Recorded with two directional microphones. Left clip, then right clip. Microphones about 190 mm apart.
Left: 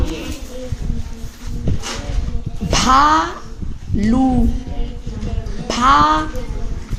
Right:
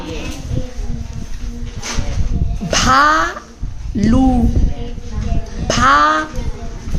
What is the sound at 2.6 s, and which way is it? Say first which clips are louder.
A woman's voice: right 1 dB; 15° right (ahead or behind).